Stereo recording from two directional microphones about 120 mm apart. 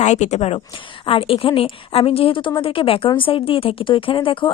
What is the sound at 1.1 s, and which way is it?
A woman's voice, 50° left (ahead or behind).